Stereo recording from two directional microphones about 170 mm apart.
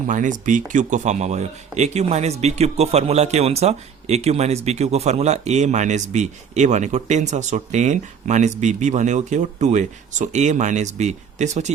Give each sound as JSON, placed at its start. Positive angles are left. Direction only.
{"t": 0.1, "sound": "speech", "side_deg": -50}